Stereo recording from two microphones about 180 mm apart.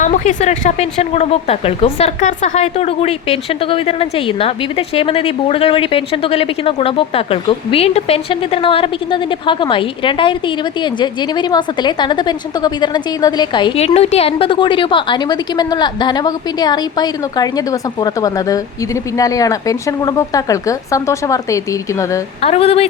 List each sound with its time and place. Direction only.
0.0 s speech: 45° left (ahead or behind); by 22.2 s 20° left (ahead or behind)
22.4 s speech: 35° left (ahead or behind)